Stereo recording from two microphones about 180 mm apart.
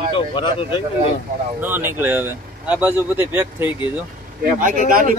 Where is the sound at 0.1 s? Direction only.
30° left (ahead or behind).